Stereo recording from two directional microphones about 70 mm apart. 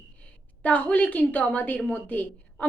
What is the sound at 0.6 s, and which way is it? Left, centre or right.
A woman's voice, left.